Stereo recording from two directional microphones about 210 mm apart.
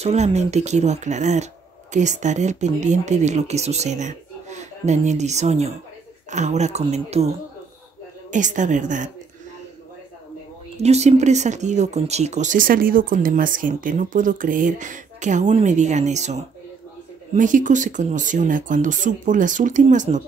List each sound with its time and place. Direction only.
0.0 s speech: 30° right (ahead or behind)
10.8 s speech: 30° right (ahead or behind)